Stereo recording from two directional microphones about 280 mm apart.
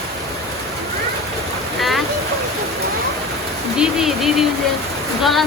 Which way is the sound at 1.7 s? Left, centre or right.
Centre.